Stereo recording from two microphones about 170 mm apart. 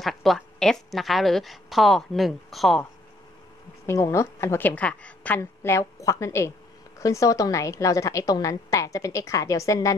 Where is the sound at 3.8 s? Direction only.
15° left (ahead or behind).